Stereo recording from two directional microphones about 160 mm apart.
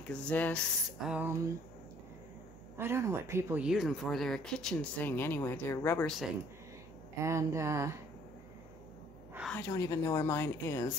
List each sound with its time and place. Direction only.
0.1 s speech: 5° left (ahead or behind)
1.1 s speech: 15° right (ahead or behind)
2.8 s speech: 15° right (ahead or behind)
3.6 s speech: centre (ahead or behind); by 6.0 s 15° left (ahead or behind)
6.0 s speech: centre (ahead or behind)
7.2 s speech: 20° right (ahead or behind)
9.5 s speech: 20° left (ahead or behind)